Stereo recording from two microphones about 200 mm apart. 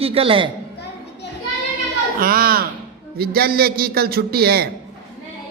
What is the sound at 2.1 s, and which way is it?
Speech, 45° right (ahead or behind).